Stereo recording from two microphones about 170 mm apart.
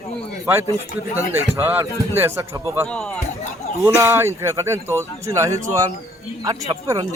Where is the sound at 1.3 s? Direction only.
15° right (ahead or behind).